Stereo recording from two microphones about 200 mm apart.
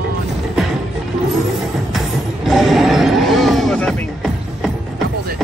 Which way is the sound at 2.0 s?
Centre (ahead or behind).